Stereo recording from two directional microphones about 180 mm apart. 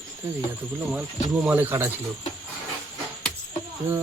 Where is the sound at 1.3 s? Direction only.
5° right (ahead or behind).